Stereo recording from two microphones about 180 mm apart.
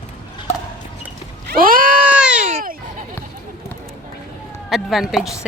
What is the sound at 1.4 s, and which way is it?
Cat, 50° right (ahead or behind).